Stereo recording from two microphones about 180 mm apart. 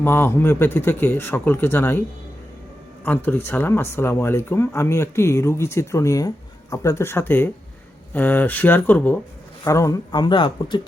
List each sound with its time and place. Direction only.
0.0 s a man's voice: 10° left (ahead or behind)